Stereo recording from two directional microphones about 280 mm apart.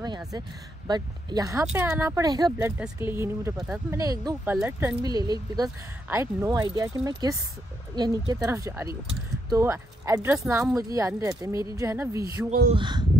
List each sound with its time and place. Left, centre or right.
0.8 s speech: centre